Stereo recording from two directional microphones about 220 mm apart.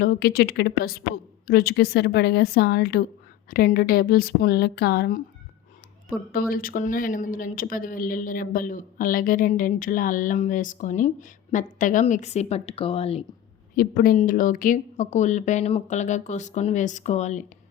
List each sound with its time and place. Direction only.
0.0 s a woman's voice: 45° left (ahead or behind)
6.3 s speech: 40° left (ahead or behind)
13.7 s speech: 40° left (ahead or behind)